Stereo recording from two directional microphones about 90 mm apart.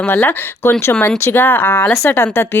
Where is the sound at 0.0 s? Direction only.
25° left (ahead or behind).